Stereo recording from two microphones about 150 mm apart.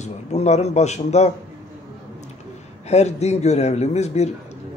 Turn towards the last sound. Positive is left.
turn(degrees=45)  # may be behind; listen again after turning